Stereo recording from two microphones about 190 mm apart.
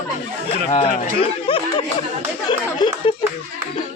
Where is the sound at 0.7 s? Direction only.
30° left (ahead or behind).